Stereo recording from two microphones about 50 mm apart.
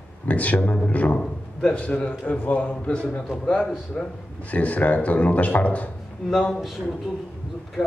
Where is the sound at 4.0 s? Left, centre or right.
Centre.